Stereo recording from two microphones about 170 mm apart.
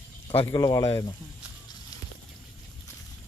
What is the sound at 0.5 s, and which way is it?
Speech, 20° left (ahead or behind).